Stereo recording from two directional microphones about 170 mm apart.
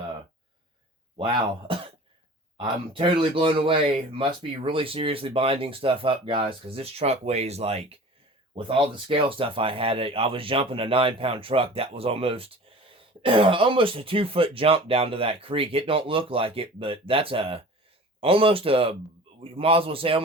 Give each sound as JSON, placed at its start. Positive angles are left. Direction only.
{"t": 1.1, "sound": "a man's voice", "side_deg": -30}